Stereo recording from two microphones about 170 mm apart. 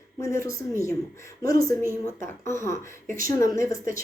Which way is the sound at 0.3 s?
15° left (ahead or behind).